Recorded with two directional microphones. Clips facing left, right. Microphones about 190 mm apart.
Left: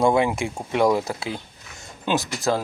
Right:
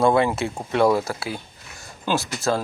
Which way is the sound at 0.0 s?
15° left (ahead or behind).